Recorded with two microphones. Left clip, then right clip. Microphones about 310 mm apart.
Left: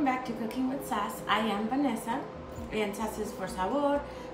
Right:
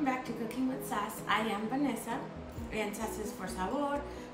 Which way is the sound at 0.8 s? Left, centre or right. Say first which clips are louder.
Left 4 dB; centre.